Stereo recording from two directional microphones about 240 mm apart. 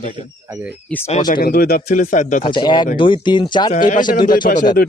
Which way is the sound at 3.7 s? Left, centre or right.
Left.